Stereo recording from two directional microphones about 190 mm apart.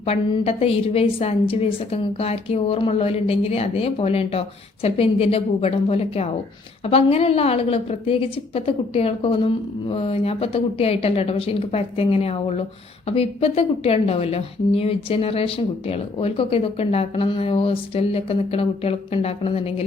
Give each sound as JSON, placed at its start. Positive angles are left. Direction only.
{"t": 0.0, "sound": "a woman's voice", "side_deg": 30}